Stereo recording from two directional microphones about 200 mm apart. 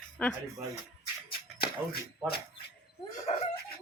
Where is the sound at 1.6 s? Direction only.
50° left (ahead or behind).